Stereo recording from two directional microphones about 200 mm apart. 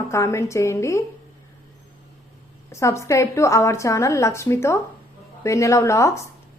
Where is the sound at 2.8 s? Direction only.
15° left (ahead or behind).